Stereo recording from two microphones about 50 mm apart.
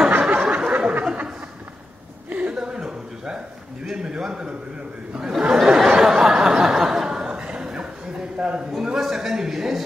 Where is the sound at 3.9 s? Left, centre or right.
Centre.